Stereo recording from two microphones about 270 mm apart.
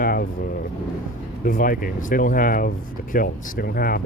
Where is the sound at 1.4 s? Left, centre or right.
Left.